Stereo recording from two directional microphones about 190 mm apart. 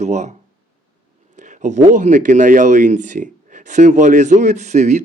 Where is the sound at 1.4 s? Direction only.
40° right (ahead or behind).